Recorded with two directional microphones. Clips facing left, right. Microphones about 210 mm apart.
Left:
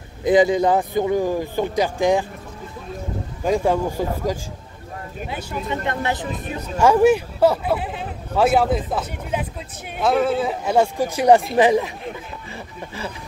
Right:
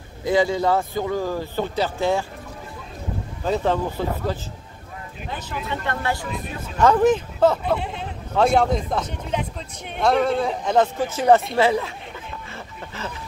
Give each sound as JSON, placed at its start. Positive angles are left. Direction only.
{"t": 0.2, "sound": "speech", "side_deg": 20}
{"t": 3.4, "sound": "speech", "side_deg": 10}
{"t": 5.7, "sound": "speech", "side_deg": 20}